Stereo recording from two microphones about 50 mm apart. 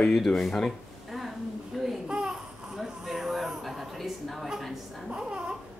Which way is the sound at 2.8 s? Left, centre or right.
Centre.